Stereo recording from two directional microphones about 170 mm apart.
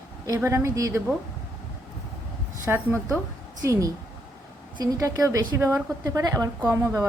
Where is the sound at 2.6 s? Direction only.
15° right (ahead or behind).